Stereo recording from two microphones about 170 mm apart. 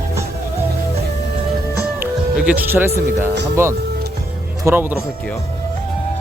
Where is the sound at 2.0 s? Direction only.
10° right (ahead or behind).